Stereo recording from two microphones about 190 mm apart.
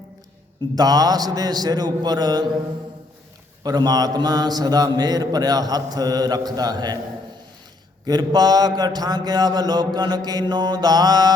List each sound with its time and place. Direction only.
0.8 s a man's voice: 20° right (ahead or behind)
3.6 s a man's voice: 20° right (ahead or behind)
8.0 s a man's voice: 20° right (ahead or behind)